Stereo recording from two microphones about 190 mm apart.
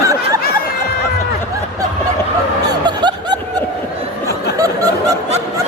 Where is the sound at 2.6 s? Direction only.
25° right (ahead or behind).